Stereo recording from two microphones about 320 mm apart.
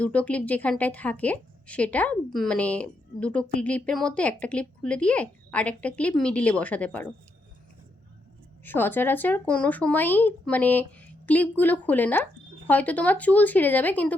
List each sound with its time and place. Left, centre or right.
0.0 s speech: centre
8.6 s speech: centre